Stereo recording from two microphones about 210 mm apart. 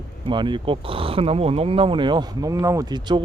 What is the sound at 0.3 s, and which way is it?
Speech, 20° right (ahead or behind).